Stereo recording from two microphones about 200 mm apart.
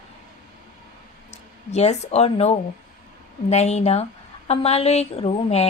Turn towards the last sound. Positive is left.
turn(degrees=30)  # may be behind; listen again after turning